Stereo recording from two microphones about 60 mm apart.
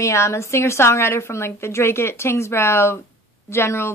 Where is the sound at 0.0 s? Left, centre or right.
Left.